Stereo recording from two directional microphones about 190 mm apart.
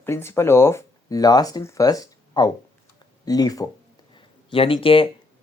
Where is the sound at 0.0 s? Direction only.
15° left (ahead or behind).